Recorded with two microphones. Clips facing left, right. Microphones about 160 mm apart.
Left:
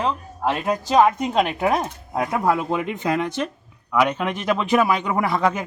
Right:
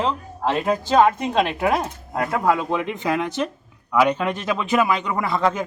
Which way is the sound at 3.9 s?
5° left (ahead or behind).